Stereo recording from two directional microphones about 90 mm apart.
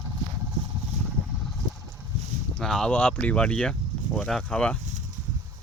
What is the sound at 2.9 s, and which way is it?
Speech, 15° left (ahead or behind).